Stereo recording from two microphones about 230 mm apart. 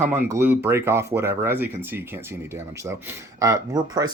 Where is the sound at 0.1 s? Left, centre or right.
Centre.